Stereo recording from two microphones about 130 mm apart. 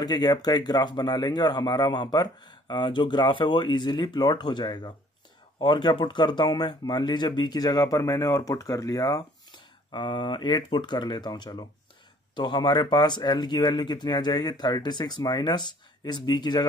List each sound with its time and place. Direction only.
0.0 s speech: 30° left (ahead or behind)